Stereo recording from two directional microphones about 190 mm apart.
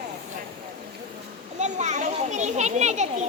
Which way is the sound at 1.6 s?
40° right (ahead or behind).